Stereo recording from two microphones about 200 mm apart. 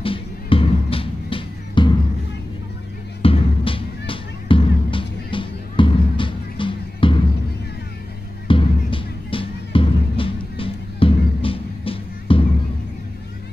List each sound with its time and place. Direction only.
0.0 s music: 25° left (ahead or behind)
3.2 s music: 25° left (ahead or behind)
8.5 s music: 25° left (ahead or behind)